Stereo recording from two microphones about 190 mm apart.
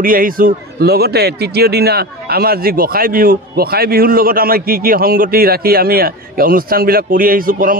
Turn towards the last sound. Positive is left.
turn(degrees=-45)  # may be behind; listen again after turning